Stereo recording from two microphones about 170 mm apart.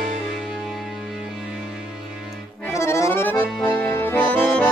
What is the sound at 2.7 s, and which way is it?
Accordion, 15° left (ahead or behind).